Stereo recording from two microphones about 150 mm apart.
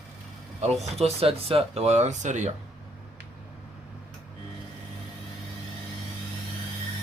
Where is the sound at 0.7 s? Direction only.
Centre (ahead or behind).